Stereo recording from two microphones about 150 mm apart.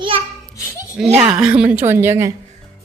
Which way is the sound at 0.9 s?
5° right (ahead or behind).